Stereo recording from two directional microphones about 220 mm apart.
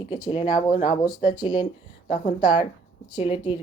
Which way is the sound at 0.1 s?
20° left (ahead or behind).